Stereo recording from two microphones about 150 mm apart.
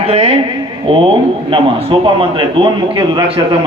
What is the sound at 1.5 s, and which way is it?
A man's voice, 35° right (ahead or behind).